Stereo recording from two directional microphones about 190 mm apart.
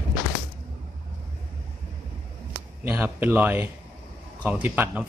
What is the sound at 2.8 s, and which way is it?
A man's voice, 10° right (ahead or behind).